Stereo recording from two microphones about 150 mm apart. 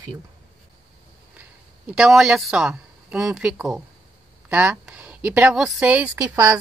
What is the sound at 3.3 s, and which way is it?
Speech, 5° right (ahead or behind).